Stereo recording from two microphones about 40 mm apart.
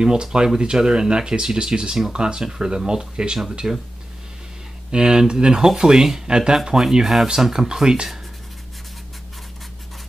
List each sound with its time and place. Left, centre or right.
0.0 s speech: centre
4.9 s speech: centre